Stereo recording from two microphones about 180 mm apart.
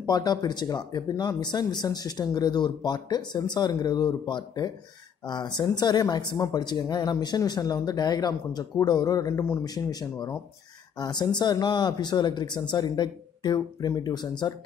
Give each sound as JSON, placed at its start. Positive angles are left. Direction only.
{"t": 0.0, "sound": "speech", "side_deg": 20}